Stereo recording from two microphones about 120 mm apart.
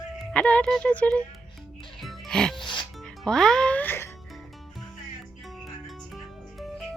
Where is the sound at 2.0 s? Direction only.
5° left (ahead or behind).